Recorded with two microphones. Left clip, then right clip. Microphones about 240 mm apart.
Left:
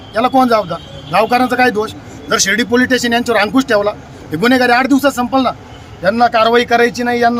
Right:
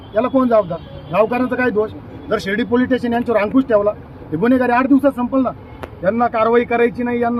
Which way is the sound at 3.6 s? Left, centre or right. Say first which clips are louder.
Left 2 dB; centre.